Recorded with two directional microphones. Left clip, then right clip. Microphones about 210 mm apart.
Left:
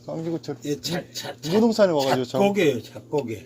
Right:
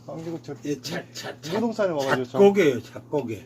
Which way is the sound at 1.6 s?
55° left (ahead or behind).